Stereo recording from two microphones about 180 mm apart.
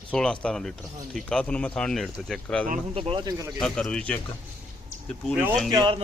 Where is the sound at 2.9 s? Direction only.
30° right (ahead or behind).